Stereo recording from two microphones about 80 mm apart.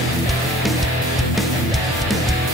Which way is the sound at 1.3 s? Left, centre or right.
Centre.